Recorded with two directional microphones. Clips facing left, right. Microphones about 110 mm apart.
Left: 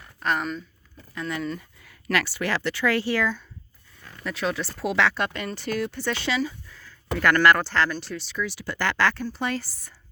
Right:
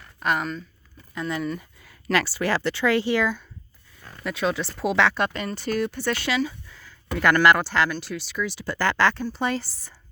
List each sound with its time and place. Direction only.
0.2 s speech: 5° right (ahead or behind)
1.1 s speech: 20° right (ahead or behind)
8.6 s speech: 35° right (ahead or behind)